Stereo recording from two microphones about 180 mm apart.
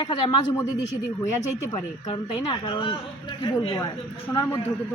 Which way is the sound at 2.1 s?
25° left (ahead or behind).